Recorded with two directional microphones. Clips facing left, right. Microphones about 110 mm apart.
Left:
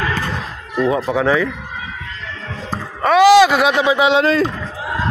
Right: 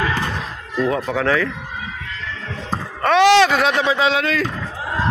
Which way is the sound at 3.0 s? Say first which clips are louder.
Left 3 dB; 5° left (ahead or behind).